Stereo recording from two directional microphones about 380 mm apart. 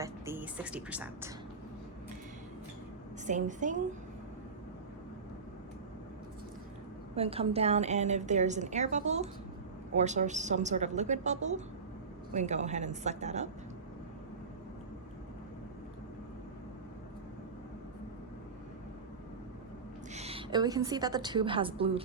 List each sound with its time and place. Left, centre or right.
0.0 s a woman's voice: centre
3.2 s a woman's voice: centre
7.2 s a woman's voice: centre
20.1 s a woman's voice: centre